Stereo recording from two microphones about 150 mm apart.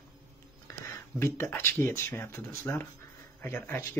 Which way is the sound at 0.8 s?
15° left (ahead or behind).